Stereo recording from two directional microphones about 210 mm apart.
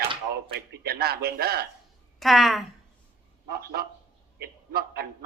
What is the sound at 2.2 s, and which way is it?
Speech, centre (ahead or behind).